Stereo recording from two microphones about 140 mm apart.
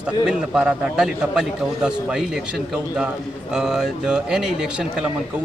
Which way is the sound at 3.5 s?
5° right (ahead or behind).